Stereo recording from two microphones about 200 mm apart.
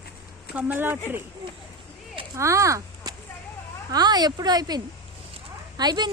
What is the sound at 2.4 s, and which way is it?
Speech, 15° right (ahead or behind).